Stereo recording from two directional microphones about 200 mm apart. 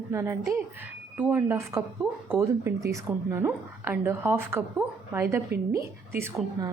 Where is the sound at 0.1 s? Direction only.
15° right (ahead or behind).